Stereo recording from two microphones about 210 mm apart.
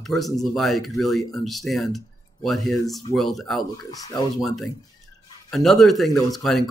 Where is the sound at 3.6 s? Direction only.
20° left (ahead or behind).